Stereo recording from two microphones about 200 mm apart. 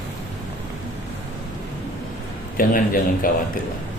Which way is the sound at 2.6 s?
45° left (ahead or behind).